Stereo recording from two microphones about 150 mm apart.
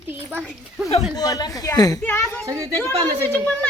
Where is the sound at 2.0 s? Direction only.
15° left (ahead or behind).